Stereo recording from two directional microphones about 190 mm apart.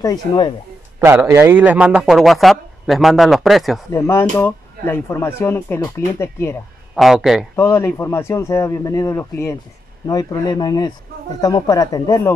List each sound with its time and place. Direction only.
0.0 s speech: 20° left (ahead or behind)
0.9 s a man's voice: 10° right (ahead or behind)
3.9 s speech: 15° left (ahead or behind)
7.0 s a man's voice: centre (ahead or behind)
7.5 s speech: 15° left (ahead or behind)